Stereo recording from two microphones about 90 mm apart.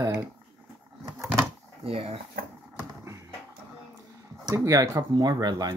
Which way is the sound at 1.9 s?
90° right.